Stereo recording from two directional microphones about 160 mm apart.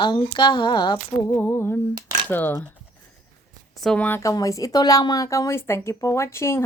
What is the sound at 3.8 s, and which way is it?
Speech, 5° left (ahead or behind).